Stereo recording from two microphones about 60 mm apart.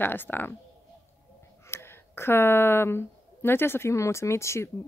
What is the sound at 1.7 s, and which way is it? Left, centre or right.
Speech, left.